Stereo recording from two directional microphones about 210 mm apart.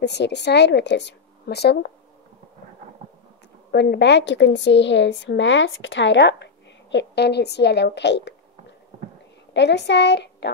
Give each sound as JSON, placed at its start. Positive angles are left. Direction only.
{"t": 0.0, "sound": "speech", "side_deg": 55}
{"t": 3.7, "sound": "a woman's voice", "side_deg": 55}